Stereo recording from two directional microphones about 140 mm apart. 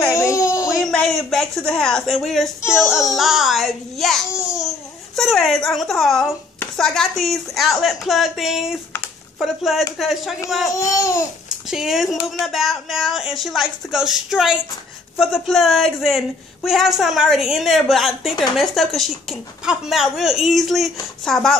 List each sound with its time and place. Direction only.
0.1 s a sound: 20° left (ahead or behind)
0.9 s a woman's voice: 5° left (ahead or behind)
10.7 s babbling: 20° left (ahead or behind)
11.4 s a child's voice: 5° right (ahead or behind)